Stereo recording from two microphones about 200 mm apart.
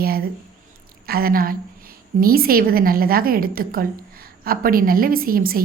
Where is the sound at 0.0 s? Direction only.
50° right (ahead or behind).